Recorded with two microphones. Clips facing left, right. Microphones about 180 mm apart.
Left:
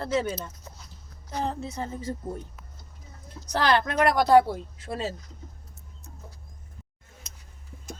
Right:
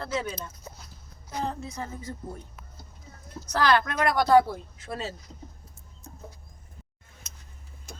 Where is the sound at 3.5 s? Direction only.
25° left (ahead or behind).